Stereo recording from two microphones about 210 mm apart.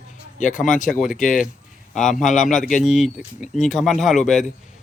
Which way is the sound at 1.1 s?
40° left (ahead or behind).